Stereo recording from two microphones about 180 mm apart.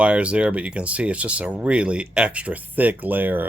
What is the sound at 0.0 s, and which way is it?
Speech, 5° right (ahead or behind).